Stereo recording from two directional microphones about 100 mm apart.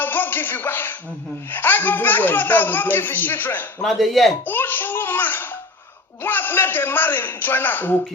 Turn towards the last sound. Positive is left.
turn(degrees=20)  # may be behind; listen again after turning